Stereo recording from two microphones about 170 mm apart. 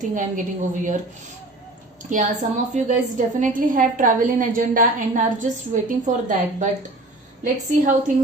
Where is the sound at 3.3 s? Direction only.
50° right (ahead or behind).